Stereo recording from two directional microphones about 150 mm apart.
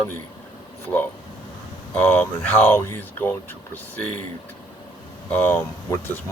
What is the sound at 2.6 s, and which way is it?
Speech, 15° left (ahead or behind).